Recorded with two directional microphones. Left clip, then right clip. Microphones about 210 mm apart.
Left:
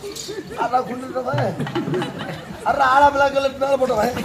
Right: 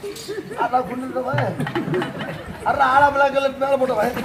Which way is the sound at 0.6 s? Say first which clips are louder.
Even; 25° left (ahead or behind).